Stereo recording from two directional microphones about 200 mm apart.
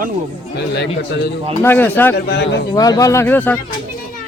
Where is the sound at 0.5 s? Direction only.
55° left (ahead or behind).